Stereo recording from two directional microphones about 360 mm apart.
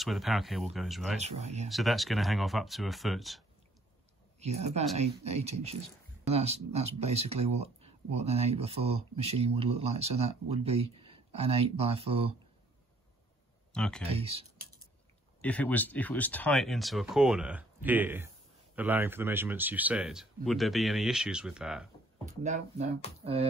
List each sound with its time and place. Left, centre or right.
0.0 s speech: centre
1.2 s speech: centre
1.7 s speech: centre
4.4 s speech: centre
13.7 s speech: centre
14.0 s speech: centre
15.4 s speech: centre
22.2 s speech: centre